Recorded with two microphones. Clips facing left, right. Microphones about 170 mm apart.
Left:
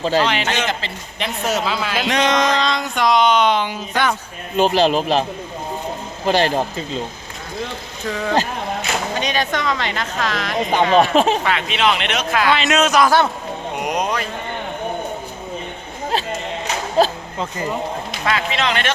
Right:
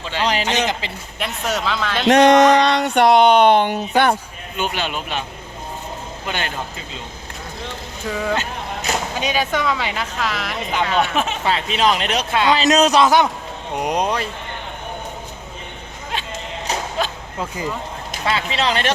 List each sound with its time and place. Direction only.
0.0 s speech: 40° left (ahead or behind)
0.4 s a woman's voice: 15° right (ahead or behind)
1.2 s a man's voice: centre (ahead or behind)
2.0 s speech: 65° right (ahead or behind)
4.5 s speech: 35° left (ahead or behind)
6.2 s speech: 35° left (ahead or behind)
8.0 s a man's voice: 5° right (ahead or behind)
10.9 s speech: 90° left
11.4 s speech: 35° right (ahead or behind)
16.1 s music: 35° left (ahead or behind)
17.0 s a sound: 35° left (ahead or behind)
17.3 s a woman's voice: 5° right (ahead or behind)
18.3 s speech: 30° right (ahead or behind)